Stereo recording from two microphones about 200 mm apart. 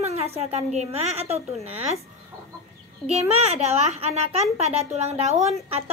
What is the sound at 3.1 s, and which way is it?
A woman's voice, 30° right (ahead or behind).